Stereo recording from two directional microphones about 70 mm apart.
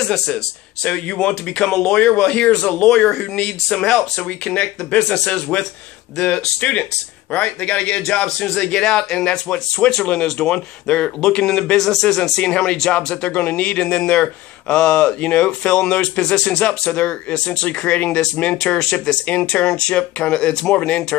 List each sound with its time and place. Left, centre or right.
0.8 s speech: centre